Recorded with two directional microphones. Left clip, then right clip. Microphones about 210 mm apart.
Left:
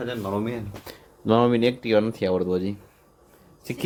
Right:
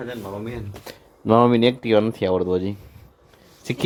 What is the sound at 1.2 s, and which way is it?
Speech, 5° right (ahead or behind).